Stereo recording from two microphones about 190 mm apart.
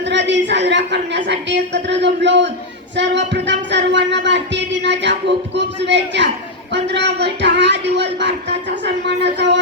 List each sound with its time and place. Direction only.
0.0 s a woman's voice: 70° right (ahead or behind)